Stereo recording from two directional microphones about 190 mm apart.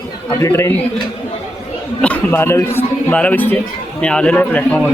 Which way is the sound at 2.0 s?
10° left (ahead or behind).